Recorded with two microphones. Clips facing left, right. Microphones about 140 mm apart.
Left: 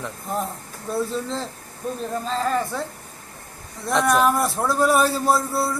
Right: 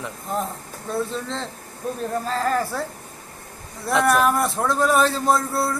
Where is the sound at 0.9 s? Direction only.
5° left (ahead or behind).